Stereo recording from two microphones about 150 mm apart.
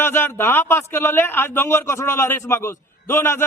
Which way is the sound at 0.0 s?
15° left (ahead or behind).